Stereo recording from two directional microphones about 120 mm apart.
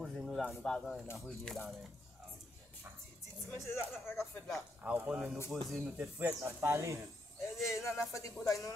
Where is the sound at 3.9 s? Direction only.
20° left (ahead or behind).